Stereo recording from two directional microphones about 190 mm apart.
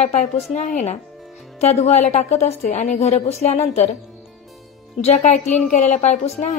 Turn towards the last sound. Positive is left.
turn(degrees=35)  # may be behind; listen again after turning